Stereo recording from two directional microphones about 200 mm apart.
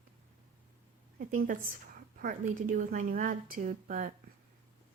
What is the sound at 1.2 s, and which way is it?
A woman's voice, 40° right (ahead or behind).